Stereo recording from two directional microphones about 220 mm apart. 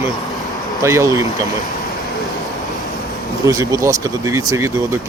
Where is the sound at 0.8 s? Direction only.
15° right (ahead or behind).